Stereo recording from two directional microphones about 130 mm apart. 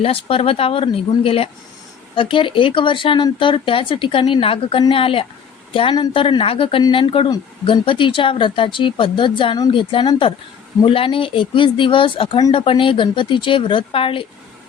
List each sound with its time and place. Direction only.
0.0 s speech: 45° left (ahead or behind)